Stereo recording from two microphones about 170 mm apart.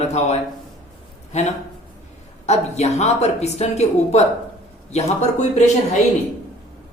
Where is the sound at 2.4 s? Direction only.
40° left (ahead or behind).